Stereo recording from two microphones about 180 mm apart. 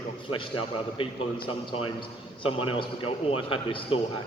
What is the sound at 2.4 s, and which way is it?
A man's voice, 30° left (ahead or behind).